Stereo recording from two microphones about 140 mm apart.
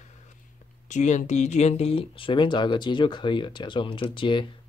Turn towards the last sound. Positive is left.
turn(degrees=35)  # may be behind; listen again after turning